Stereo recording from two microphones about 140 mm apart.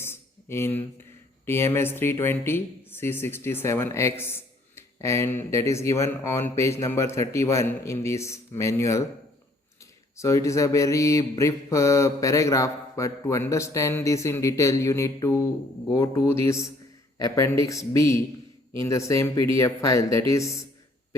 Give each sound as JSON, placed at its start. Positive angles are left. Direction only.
{"t": 0.0, "sound": "a sound", "side_deg": 15}
{"t": 1.5, "sound": "speech", "side_deg": 15}
{"t": 4.2, "sound": "mantra", "side_deg": 15}
{"t": 10.2, "sound": "mantra", "side_deg": 20}